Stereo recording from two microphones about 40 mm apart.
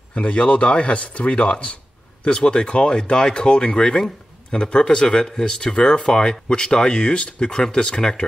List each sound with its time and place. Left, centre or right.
0.1 s a man's voice: left